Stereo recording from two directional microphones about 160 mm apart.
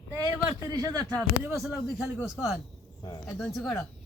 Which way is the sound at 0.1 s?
15° right (ahead or behind).